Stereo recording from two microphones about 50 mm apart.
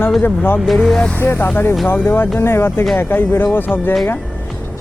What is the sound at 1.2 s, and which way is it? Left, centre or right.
Speech, left.